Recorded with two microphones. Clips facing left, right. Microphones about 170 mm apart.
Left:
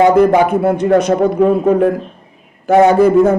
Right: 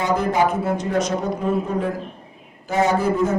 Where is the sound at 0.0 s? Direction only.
60° left (ahead or behind).